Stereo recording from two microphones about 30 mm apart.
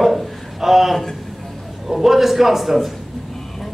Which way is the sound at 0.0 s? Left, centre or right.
Centre.